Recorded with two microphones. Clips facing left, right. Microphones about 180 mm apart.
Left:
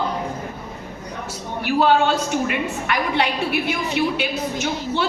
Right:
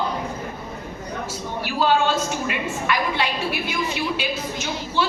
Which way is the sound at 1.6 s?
60° left (ahead or behind).